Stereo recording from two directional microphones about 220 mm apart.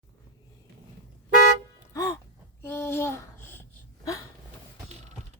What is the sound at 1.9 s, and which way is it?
Music, 15° left (ahead or behind).